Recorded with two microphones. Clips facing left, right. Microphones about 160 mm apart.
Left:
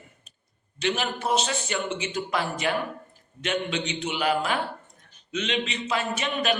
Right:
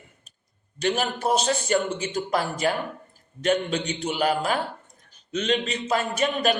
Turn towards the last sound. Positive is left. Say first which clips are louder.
# right 3 dB
turn(degrees=-40)  # may be behind; listen again after turning